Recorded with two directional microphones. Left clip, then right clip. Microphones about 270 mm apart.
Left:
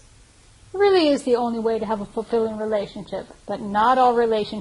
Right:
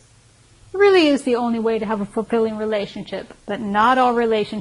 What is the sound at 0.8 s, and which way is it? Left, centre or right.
A woman's voice, right.